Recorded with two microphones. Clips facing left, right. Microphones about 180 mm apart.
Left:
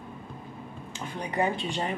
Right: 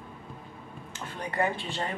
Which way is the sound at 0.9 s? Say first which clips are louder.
Left 2 dB; 15° left (ahead or behind).